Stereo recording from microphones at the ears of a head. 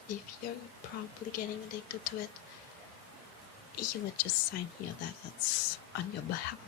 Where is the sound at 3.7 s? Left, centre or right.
Left.